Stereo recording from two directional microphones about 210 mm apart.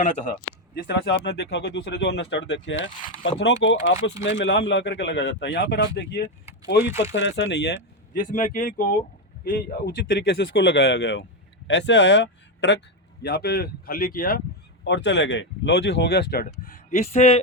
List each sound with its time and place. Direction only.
0.0 s a man's voice: 35° left (ahead or behind)
0.8 s speech: 50° left (ahead or behind)
8.1 s a man's voice: 40° left (ahead or behind)
9.4 s speech: 50° left (ahead or behind)
14.8 s speech: 55° left (ahead or behind); by 17.4 s 30° left (ahead or behind)